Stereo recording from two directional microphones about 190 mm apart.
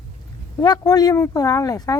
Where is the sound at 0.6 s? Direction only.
20° left (ahead or behind).